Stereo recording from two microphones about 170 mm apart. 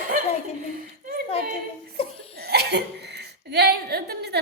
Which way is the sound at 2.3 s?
70° right (ahead or behind).